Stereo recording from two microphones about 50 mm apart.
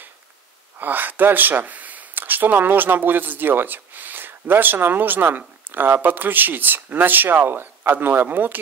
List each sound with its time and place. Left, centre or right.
0.7 s speech: right